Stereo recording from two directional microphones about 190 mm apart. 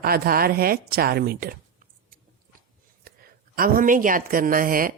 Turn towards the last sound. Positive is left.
turn(degrees=-50)  # may be behind; listen again after turning